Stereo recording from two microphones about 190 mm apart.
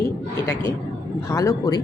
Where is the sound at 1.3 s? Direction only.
15° left (ahead or behind).